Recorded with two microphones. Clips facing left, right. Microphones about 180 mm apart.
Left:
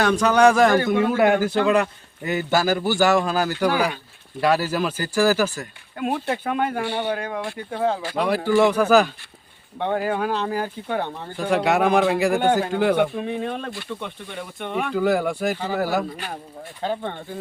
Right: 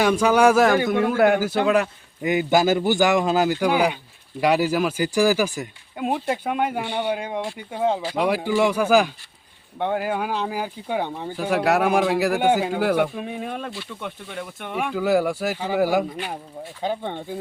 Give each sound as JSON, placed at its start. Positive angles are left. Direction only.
{"t": 0.0, "sound": "speech", "side_deg": -10}